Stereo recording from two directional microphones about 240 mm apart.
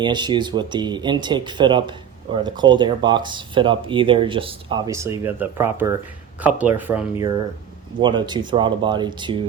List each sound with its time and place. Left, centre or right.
0.0 s speech: centre
8.0 s speech: centre